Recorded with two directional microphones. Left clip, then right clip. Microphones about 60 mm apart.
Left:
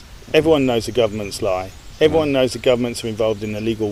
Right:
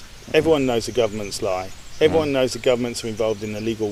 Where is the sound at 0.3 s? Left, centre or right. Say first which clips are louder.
Left 3 dB; left.